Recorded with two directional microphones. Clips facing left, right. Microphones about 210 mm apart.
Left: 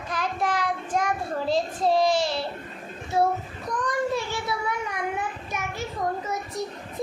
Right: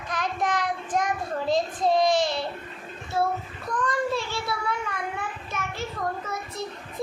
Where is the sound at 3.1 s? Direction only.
20° left (ahead or behind).